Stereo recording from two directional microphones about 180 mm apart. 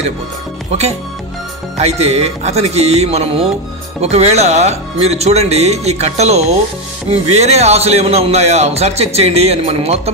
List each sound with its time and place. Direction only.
0.7 s a man's voice: 35° right (ahead or behind)